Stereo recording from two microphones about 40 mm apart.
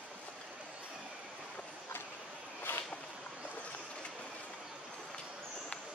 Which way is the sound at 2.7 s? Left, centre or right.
Left.